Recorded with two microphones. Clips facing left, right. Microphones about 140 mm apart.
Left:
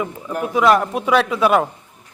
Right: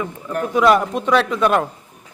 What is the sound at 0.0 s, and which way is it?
Speech, 15° left (ahead or behind).